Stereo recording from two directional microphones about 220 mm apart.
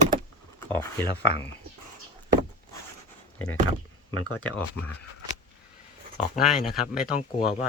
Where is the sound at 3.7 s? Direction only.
75° left (ahead or behind).